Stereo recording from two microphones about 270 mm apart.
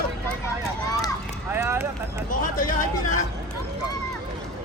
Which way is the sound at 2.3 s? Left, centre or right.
Left.